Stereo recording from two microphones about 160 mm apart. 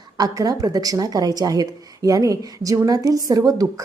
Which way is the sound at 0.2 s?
25° right (ahead or behind).